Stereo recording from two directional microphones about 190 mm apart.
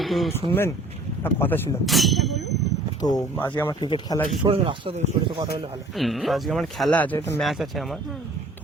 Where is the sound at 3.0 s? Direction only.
20° left (ahead or behind).